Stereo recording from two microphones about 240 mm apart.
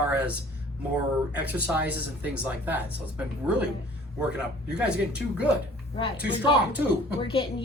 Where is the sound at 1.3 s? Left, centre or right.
Centre.